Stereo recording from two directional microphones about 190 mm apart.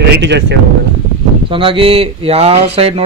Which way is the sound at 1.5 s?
30° right (ahead or behind).